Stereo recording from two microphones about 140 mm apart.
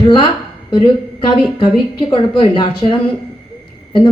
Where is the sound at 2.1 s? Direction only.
35° left (ahead or behind).